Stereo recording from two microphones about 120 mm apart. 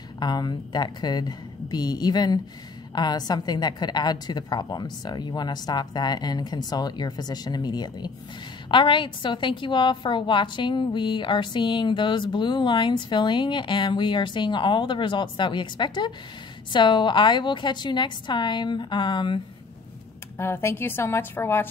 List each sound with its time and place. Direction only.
0.2 s a woman's voice: 35° left (ahead or behind)
20.3 s a woman's voice: 20° left (ahead or behind)